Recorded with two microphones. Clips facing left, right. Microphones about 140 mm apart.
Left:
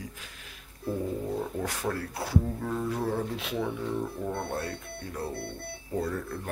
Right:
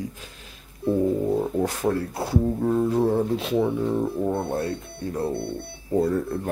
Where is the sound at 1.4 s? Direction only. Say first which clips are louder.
Right 8 dB; 25° right (ahead or behind).